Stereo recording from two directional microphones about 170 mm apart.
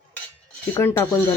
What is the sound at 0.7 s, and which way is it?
Speech, 15° left (ahead or behind).